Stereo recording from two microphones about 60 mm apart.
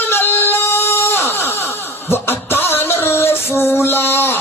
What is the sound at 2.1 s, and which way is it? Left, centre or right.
Music, left.